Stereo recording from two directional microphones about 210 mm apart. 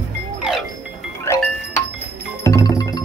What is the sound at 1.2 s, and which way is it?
Music, 15° left (ahead or behind).